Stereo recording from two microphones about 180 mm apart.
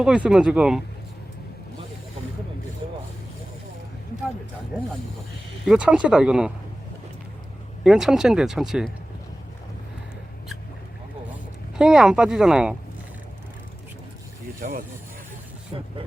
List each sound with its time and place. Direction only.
0.0 s speech: 5° right (ahead or behind)
5.6 s speech: 5° right (ahead or behind)
7.9 s speech: centre (ahead or behind)
11.8 s speech: 5° right (ahead or behind)
14.6 s speech: 55° right (ahead or behind)
15.7 s speech: 30° right (ahead or behind)